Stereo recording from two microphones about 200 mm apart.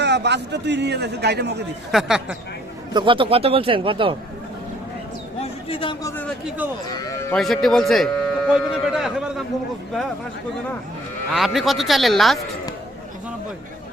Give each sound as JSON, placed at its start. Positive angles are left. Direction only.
{"t": 0.0, "sound": "a man's voice", "side_deg": -60}
{"t": 1.9, "sound": "speech", "side_deg": 0}
{"t": 2.9, "sound": "a man's voice", "side_deg": -25}
{"t": 5.4, "sound": "a man's voice", "side_deg": 30}
{"t": 6.9, "sound": "sheep", "side_deg": 15}
{"t": 7.3, "sound": "speech", "side_deg": 0}
{"t": 11.3, "sound": "speech", "side_deg": 0}